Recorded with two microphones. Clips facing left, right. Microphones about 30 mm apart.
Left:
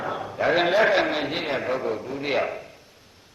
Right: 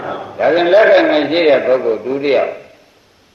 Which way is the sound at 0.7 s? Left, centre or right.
Right.